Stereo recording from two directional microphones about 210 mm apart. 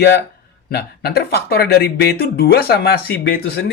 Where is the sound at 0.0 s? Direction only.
50° left (ahead or behind).